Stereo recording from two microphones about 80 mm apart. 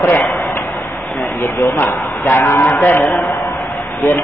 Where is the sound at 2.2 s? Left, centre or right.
Left.